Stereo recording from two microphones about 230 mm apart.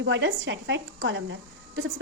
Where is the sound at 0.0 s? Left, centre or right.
Right.